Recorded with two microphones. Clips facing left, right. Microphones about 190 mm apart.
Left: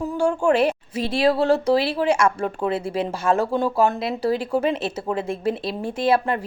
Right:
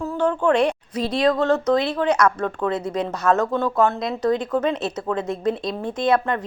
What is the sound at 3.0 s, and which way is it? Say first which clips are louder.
Speech: right 2 dB; 30° left (ahead or behind).